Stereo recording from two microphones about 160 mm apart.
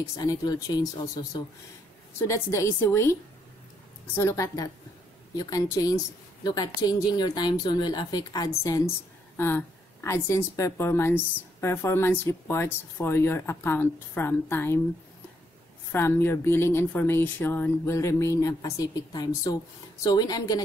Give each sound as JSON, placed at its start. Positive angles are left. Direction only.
{"t": 0.1, "sound": "speech", "side_deg": 25}
{"t": 2.1, "sound": "a woman's voice", "side_deg": 15}
{"t": 15.9, "sound": "a woman's voice", "side_deg": 15}